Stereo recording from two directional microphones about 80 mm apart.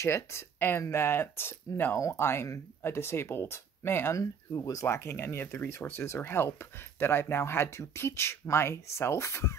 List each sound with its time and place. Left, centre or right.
0.0 s speech: left
4.2 s speech: left